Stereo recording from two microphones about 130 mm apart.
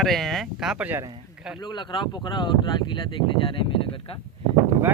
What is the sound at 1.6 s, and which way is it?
Speech, 35° left (ahead or behind).